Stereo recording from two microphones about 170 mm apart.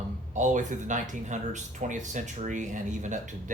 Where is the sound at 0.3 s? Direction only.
45° right (ahead or behind).